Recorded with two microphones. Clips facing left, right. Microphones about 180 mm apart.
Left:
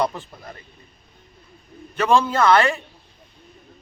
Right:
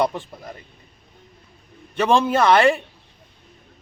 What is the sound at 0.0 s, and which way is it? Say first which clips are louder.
Speech: right 2 dB; 25° right (ahead or behind).